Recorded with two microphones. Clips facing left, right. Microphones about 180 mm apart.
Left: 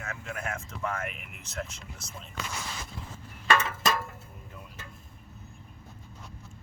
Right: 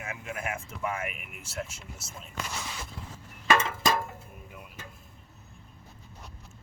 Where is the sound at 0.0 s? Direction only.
15° right (ahead or behind).